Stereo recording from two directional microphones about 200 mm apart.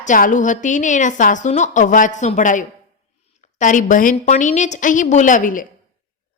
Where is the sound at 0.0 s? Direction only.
40° left (ahead or behind).